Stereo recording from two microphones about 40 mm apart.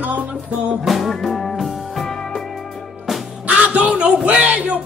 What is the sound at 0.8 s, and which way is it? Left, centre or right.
Music, centre.